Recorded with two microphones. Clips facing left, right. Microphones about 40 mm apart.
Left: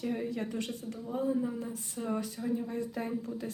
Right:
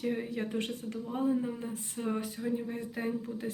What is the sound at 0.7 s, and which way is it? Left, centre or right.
Speech, right.